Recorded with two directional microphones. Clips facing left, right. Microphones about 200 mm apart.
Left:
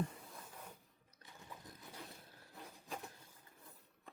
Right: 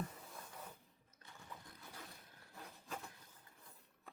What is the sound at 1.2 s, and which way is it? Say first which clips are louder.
Sewing machine: left 1 dB; 20° left (ahead or behind).